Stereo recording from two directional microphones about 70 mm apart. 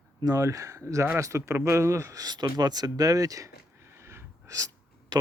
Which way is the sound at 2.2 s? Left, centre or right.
Right.